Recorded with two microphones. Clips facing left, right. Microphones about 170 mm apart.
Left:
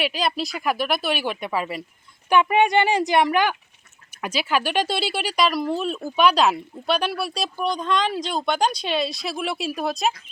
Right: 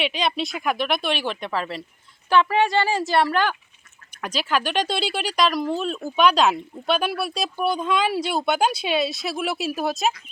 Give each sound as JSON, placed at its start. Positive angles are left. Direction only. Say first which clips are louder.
{"t": 0.0, "sound": "speech", "louder": "even", "side_deg": 0}